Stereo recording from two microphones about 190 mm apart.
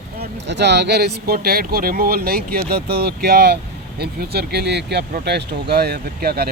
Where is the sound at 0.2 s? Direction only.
65° right (ahead or behind).